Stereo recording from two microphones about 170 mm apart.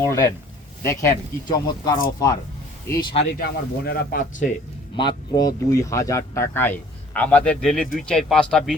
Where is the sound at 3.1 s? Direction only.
75° left (ahead or behind); by 4.4 s 60° left (ahead or behind).